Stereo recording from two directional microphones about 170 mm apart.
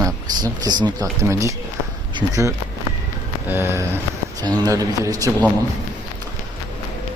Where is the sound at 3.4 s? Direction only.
15° right (ahead or behind).